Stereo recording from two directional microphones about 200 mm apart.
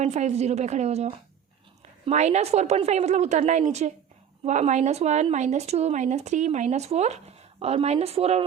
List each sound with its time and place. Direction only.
0.0 s speech: 35° right (ahead or behind)